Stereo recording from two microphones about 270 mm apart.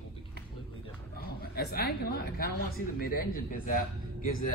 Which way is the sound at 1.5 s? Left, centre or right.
Left.